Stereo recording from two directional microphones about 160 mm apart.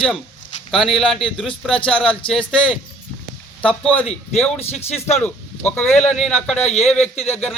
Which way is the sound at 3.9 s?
40° left (ahead or behind).